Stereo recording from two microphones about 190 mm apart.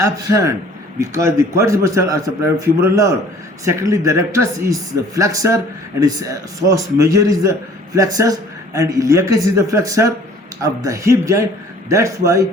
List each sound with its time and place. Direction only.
0.0 s a man's voice: 15° right (ahead or behind)